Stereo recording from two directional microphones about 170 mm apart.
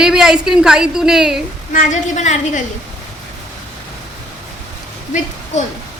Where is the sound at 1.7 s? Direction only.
45° left (ahead or behind).